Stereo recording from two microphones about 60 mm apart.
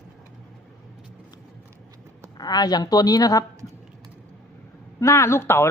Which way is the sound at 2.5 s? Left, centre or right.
Left.